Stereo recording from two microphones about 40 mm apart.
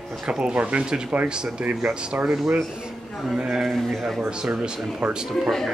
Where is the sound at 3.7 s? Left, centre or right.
Centre.